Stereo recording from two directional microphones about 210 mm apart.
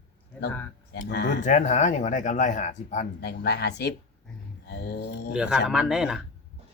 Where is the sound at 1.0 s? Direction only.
50° left (ahead or behind).